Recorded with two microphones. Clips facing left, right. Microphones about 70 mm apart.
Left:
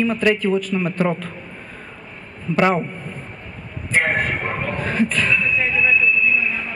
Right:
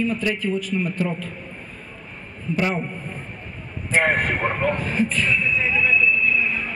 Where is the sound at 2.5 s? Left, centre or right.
Left.